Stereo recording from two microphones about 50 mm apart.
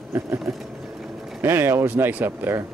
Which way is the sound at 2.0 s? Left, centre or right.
Right.